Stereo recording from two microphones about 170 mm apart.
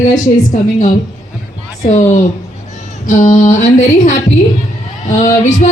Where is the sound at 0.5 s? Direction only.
50° left (ahead or behind).